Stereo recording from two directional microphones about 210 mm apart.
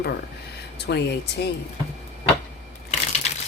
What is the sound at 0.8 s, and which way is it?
Speech, 55° left (ahead or behind).